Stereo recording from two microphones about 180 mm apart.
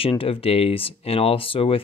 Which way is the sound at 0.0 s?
30° left (ahead or behind).